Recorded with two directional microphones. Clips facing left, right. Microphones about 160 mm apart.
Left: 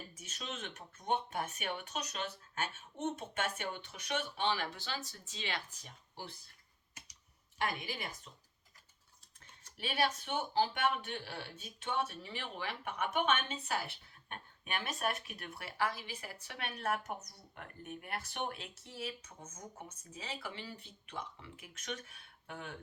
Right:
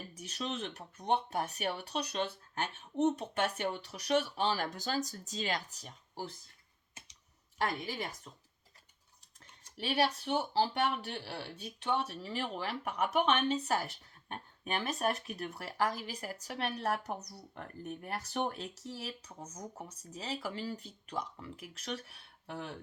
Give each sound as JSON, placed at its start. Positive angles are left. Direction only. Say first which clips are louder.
{"t": 0.1, "sound": "speech", "louder": "right 7 dB", "side_deg": -35}
{"t": 7.6, "sound": "speech", "louder": "right 3 dB", "side_deg": -40}
{"t": 9.7, "sound": "speech", "louder": "right 3 dB", "side_deg": -35}